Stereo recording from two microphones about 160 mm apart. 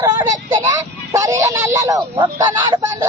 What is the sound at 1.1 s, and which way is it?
Speech, 20° right (ahead or behind).